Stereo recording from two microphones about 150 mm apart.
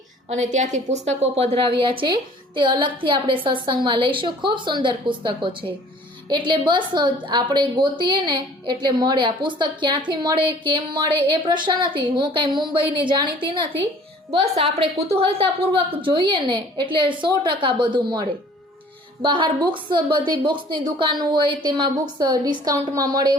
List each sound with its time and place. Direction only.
0.3 s a woman's voice: 55° right (ahead or behind); by 13.7 s 35° right (ahead or behind)
14.3 s a woman's voice: 45° right (ahead or behind)
19.2 s a woman's voice: 30° right (ahead or behind)